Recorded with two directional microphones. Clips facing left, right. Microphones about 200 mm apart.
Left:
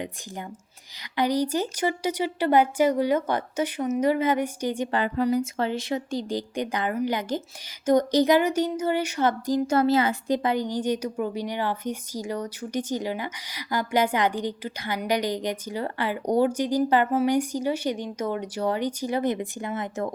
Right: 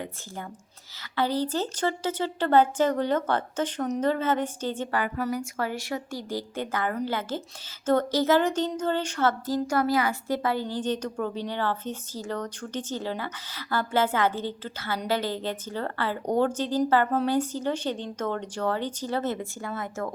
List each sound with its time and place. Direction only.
1.1 s speech: 15° left (ahead or behind)
4.9 s speech: 25° left (ahead or behind)